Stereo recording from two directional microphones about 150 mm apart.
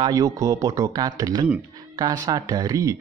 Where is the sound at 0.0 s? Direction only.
25° right (ahead or behind).